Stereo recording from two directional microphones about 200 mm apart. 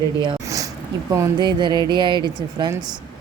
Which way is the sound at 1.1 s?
20° right (ahead or behind).